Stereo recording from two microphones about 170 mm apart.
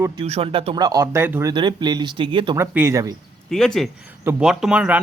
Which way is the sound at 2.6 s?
15° right (ahead or behind).